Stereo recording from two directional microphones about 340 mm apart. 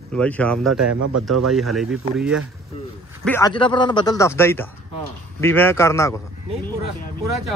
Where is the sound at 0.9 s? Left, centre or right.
Right.